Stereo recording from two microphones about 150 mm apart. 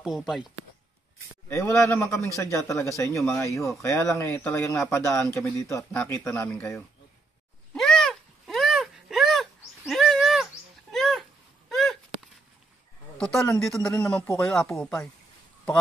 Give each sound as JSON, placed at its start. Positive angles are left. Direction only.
{"t": 0.0, "sound": "speech", "side_deg": -5}
{"t": 1.5, "sound": "a man's voice", "side_deg": 20}
{"t": 7.7, "sound": "a sound", "side_deg": 5}
{"t": 13.2, "sound": "speech", "side_deg": 5}